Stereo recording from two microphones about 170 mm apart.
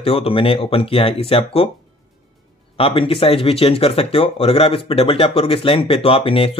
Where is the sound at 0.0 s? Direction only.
35° left (ahead or behind).